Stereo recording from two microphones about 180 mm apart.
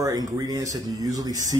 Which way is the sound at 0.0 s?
20° right (ahead or behind).